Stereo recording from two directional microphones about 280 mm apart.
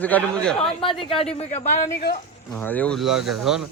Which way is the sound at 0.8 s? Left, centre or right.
Centre.